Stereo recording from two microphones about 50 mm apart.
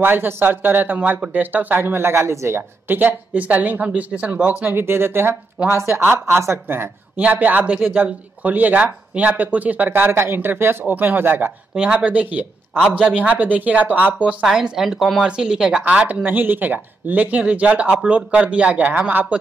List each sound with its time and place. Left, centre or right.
0.0 s speech: right
2.9 s speech: right
3.3 s speech: right
4.6 s speech: right
5.7 s speech: right
6.0 s speech: right
7.2 s speech: right
10.1 s speech: right
11.7 s speech: right
12.1 s speech: right
14.4 s speech: centre
15.8 s speech: right